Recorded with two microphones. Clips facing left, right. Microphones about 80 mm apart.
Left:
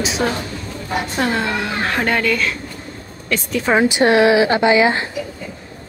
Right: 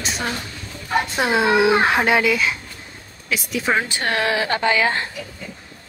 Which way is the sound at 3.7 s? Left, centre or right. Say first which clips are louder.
Left 9 dB; centre.